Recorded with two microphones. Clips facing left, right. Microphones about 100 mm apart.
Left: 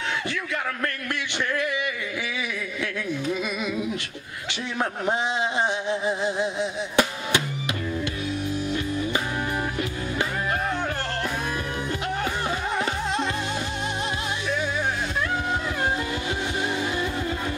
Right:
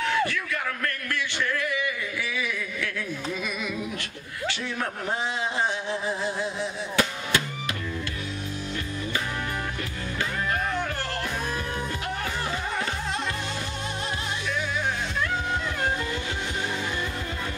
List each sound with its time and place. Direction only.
5.9 s music: 20° left (ahead or behind)